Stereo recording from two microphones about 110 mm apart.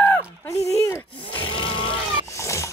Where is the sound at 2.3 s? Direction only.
25° left (ahead or behind).